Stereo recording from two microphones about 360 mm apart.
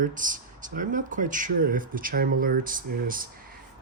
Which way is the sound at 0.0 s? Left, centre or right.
Right.